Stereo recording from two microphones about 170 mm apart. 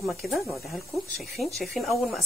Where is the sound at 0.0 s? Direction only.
Centre (ahead or behind).